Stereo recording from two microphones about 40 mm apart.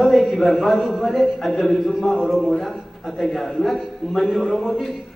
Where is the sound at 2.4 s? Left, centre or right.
Centre.